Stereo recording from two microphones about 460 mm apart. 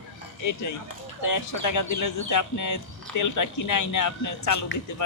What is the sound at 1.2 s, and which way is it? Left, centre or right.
Speech, left.